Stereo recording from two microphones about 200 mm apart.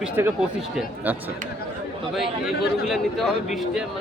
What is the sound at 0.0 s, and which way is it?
Speech, 10° right (ahead or behind).